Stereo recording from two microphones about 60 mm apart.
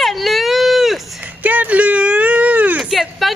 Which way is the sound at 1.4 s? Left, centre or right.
Right.